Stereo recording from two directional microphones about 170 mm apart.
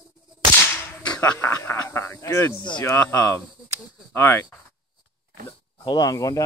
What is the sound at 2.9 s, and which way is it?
Speech, 15° left (ahead or behind).